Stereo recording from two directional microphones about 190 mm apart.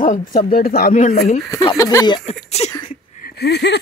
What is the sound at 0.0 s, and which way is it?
Speech, 45° left (ahead or behind).